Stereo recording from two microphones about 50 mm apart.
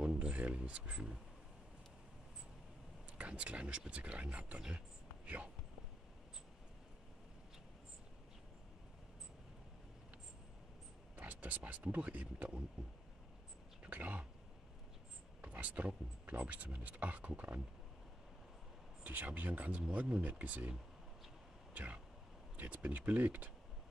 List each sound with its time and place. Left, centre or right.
0.0 s speech: right
3.2 s speech: right
4.7 s a sound: right
11.1 s speech: right
13.8 s a sound: right
15.4 s speech: right
19.0 s speech: right
21.7 s speech: right